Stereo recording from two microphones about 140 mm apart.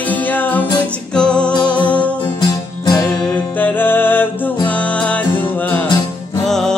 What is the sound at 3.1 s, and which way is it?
Music, 10° left (ahead or behind).